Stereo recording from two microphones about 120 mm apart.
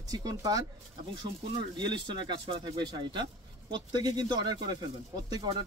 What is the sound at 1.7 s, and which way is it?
Speech, 40° right (ahead or behind).